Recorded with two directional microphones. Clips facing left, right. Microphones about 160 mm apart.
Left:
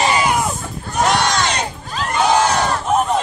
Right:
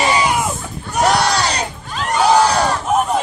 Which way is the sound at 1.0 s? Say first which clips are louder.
Right 1 dB; 35° right (ahead or behind).